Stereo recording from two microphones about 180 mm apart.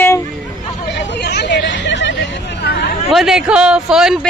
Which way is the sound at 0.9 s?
70° left (ahead or behind).